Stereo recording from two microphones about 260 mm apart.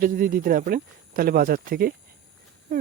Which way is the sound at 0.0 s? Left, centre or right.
Right.